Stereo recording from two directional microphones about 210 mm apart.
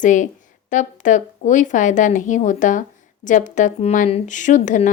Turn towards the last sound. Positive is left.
turn(degrees=35)  # may be behind; listen again after turning